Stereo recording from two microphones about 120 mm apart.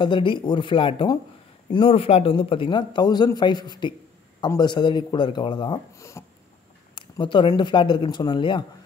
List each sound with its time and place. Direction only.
0.0 s a man's voice: 45° left (ahead or behind)
5.9 s speech: 25° left (ahead or behind)
7.0 s speech: 45° left (ahead or behind)